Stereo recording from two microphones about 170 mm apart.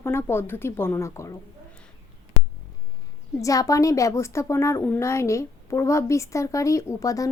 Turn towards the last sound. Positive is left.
turn(degrees=20)  # may be behind; listen again after turning